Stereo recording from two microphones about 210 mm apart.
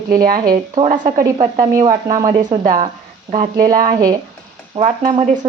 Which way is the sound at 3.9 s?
15° right (ahead or behind).